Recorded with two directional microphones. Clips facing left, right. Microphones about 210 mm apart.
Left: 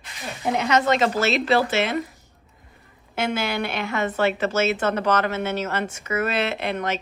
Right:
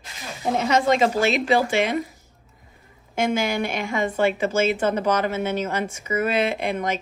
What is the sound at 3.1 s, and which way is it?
A woman's voice, 10° right (ahead or behind).